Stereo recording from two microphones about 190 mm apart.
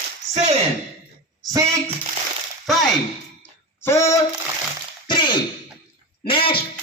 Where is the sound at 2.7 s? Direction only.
Centre (ahead or behind).